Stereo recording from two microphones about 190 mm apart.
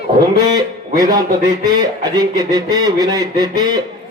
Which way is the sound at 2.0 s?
20° right (ahead or behind).